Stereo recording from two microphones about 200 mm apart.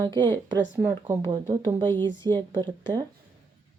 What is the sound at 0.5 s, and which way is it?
Speech, 10° right (ahead or behind).